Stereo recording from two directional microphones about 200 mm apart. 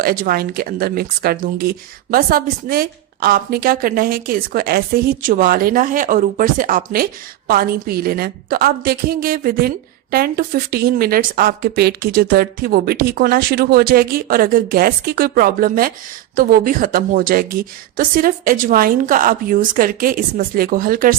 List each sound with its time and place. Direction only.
0.0 s speech: 50° right (ahead or behind)